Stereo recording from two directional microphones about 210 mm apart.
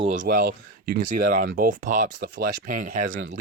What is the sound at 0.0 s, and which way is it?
Speech, 35° right (ahead or behind).